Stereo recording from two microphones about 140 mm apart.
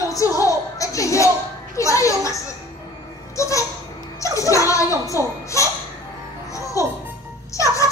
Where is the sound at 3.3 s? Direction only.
20° left (ahead or behind).